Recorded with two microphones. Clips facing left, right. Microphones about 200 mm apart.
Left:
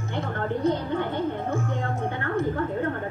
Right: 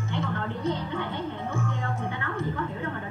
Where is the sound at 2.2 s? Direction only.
45° left (ahead or behind).